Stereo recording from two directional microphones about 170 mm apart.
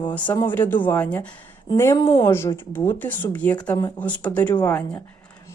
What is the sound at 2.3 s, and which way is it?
Speech, 15° left (ahead or behind).